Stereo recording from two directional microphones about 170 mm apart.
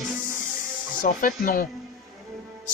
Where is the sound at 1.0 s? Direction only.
50° left (ahead or behind).